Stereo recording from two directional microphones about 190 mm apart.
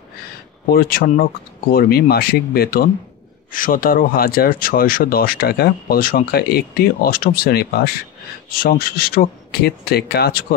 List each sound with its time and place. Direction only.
0.7 s speech: 50° left (ahead or behind)